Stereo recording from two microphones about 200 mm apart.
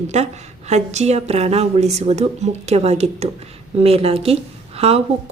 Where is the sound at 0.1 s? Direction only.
35° right (ahead or behind).